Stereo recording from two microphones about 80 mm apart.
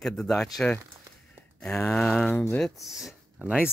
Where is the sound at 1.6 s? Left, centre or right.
Centre.